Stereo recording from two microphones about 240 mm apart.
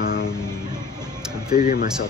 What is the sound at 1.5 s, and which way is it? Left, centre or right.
Speech, left.